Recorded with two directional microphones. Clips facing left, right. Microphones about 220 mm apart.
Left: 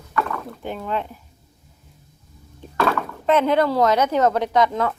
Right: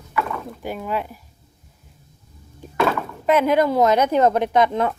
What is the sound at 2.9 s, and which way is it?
Speech, 10° right (ahead or behind).